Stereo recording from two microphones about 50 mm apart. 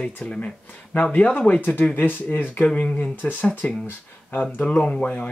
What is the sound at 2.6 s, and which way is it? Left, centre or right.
Speech, left.